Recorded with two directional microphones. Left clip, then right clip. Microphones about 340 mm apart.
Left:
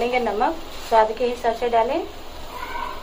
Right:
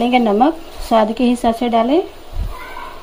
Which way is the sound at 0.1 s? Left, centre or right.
Right.